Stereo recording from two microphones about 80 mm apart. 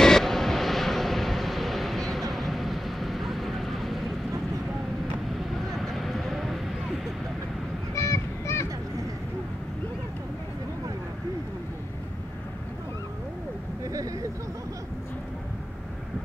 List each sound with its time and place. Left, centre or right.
0.0 s vehicle: centre
5.7 s a sound: centre
7.9 s honk: left